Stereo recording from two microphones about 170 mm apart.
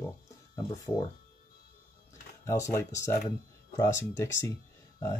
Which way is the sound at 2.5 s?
15° left (ahead or behind).